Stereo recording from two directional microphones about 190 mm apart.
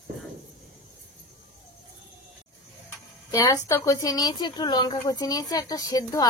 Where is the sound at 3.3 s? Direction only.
15° left (ahead or behind).